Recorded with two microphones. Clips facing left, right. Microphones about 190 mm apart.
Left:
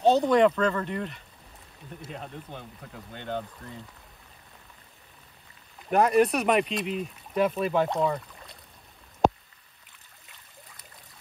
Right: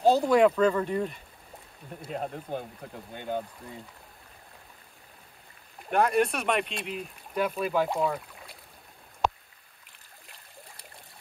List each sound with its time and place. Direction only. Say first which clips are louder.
0.0 s speech: even; centre (ahead or behind)
2.0 s speech: right 7 dB; 45° right (ahead or behind)
3.2 s speech: right 1 dB; 10° right (ahead or behind)
5.9 s speech: left 3 dB; centre (ahead or behind)
9.2 s a sound: left 6 dB; 45° left (ahead or behind)